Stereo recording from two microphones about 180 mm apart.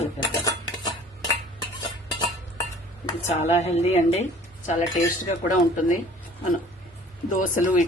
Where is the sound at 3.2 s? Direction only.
40° left (ahead or behind).